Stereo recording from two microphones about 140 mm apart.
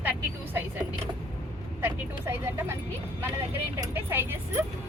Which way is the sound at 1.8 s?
15° right (ahead or behind).